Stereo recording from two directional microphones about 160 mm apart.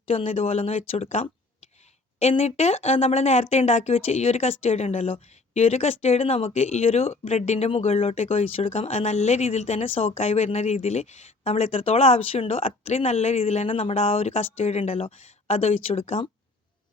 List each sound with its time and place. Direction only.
0.1 s speech: 40° left (ahead or behind)